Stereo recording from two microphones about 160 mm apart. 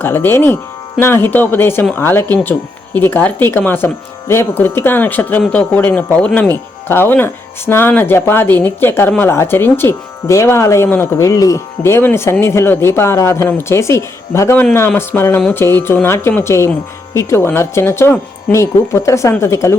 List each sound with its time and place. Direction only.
0.0 s speech: 15° left (ahead or behind)